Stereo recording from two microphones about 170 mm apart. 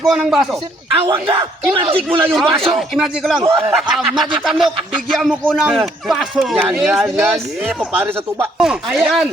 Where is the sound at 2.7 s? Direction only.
Centre (ahead or behind).